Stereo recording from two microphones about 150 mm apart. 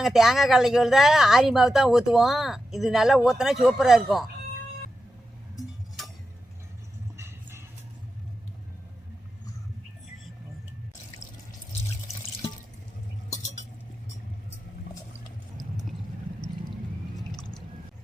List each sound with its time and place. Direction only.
0.0 s speech: centre (ahead or behind)
6.0 s tick-tock: centre (ahead or behind)
7.2 s vehicle: 15° right (ahead or behind)